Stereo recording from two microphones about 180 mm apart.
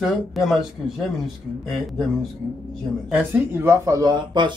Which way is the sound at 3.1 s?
10° right (ahead or behind).